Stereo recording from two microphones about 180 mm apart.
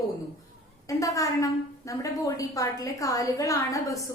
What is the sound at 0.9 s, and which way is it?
A woman's voice, 20° left (ahead or behind).